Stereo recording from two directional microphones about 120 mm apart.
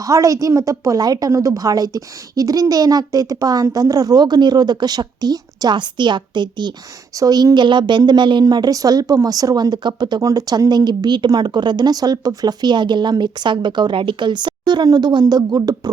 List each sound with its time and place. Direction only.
0.1 s a woman's voice: 25° right (ahead or behind)